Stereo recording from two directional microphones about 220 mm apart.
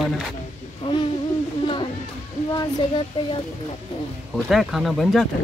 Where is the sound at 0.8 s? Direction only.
20° left (ahead or behind).